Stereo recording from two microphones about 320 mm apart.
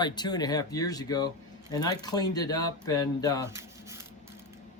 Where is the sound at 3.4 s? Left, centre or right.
Centre.